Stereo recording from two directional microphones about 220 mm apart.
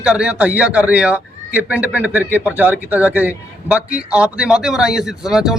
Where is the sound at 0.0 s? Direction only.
5° right (ahead or behind).